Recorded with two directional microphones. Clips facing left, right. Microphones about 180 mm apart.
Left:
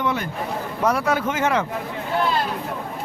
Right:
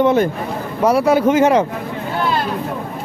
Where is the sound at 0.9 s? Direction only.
10° right (ahead or behind).